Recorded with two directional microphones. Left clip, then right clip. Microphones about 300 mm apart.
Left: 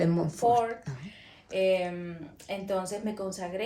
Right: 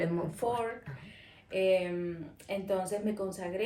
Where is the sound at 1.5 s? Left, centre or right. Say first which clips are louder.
Left 2 dB; centre.